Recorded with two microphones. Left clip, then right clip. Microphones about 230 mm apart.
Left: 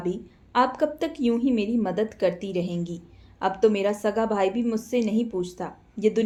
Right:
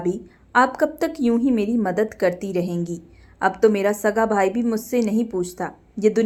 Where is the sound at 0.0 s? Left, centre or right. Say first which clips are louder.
Right 5 dB; right.